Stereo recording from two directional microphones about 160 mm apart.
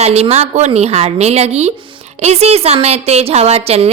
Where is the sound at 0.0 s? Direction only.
40° right (ahead or behind).